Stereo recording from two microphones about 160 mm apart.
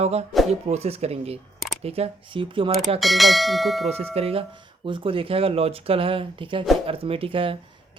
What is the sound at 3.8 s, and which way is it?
Speech, 40° right (ahead or behind).